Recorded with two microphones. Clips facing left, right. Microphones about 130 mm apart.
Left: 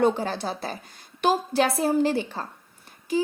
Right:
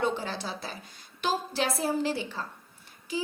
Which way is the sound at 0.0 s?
50° left (ahead or behind).